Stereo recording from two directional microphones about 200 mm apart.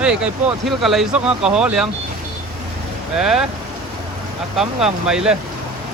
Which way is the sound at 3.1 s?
5° right (ahead or behind).